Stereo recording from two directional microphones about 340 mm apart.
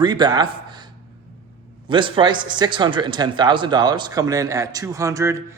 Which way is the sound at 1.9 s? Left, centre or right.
Centre.